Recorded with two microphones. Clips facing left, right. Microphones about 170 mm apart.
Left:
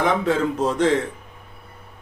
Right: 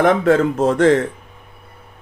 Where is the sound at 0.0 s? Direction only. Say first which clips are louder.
Right 6 dB; 50° right (ahead or behind).